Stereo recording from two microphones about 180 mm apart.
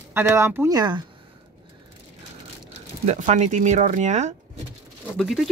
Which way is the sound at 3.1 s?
40° right (ahead or behind).